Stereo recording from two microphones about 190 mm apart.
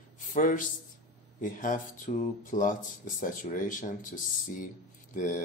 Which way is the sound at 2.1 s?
40° left (ahead or behind).